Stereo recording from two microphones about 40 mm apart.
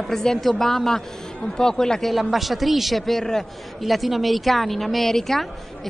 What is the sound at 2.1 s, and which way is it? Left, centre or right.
Speech, centre.